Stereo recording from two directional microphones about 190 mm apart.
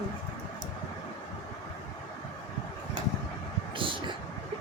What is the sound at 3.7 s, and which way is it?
Vehicle, 25° right (ahead or behind).